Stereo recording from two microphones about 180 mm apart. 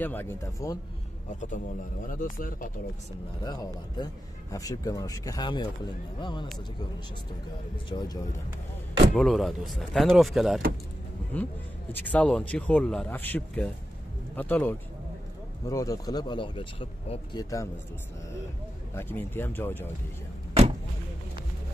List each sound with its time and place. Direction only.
0.0 s speech: 10° left (ahead or behind)
2.0 s speech: 50° left (ahead or behind)
3.4 s speech: 20° left (ahead or behind)
7.9 s speech: 30° left (ahead or behind)
9.1 s speech: centre (ahead or behind); by 17.6 s 20° left (ahead or behind)
18.9 s speech: 10° left (ahead or behind)